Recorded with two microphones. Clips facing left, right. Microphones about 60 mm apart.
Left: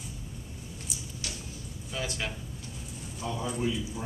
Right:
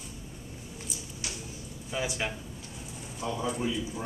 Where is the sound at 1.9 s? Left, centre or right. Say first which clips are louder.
Right 3 dB; centre.